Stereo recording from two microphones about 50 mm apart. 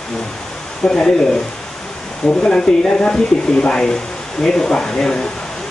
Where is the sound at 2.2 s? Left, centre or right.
Centre.